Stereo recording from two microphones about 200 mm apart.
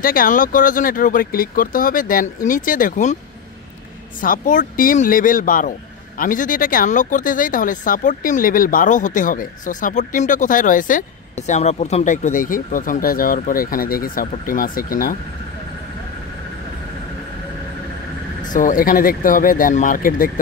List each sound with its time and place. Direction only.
0.0 s speech: 45° left (ahead or behind)
4.2 s speech: 40° left (ahead or behind)
18.4 s speech: 40° left (ahead or behind)